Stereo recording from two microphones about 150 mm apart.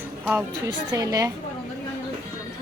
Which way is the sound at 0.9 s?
25° right (ahead or behind).